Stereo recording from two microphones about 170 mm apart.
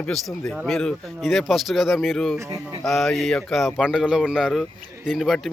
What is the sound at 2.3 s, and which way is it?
Speech, 20° right (ahead or behind).